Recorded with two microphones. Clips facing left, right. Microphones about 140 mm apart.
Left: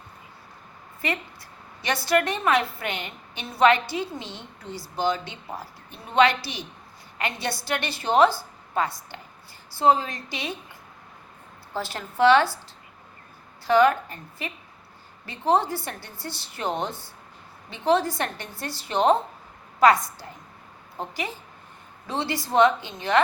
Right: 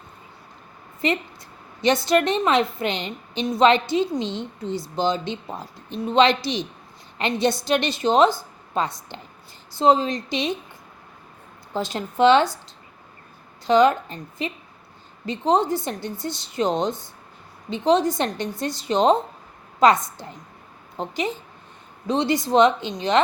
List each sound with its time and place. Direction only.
1.8 s a woman's voice: 20° right (ahead or behind)
11.7 s a woman's voice: 20° right (ahead or behind)
13.7 s a woman's voice: 20° right (ahead or behind)